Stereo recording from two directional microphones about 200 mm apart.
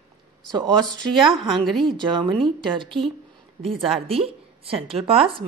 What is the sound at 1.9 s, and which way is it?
A woman's voice, 25° right (ahead or behind).